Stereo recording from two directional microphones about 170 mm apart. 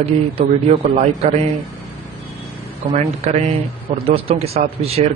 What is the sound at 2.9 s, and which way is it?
Speech, 40° right (ahead or behind).